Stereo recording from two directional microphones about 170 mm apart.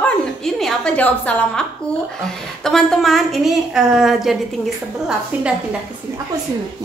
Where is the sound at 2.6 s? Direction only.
5° left (ahead or behind).